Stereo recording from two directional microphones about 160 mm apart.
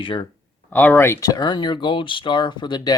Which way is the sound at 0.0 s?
30° left (ahead or behind).